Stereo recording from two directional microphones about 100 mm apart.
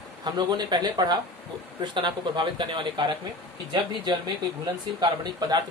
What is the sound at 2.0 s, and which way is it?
Speech, 55° right (ahead or behind).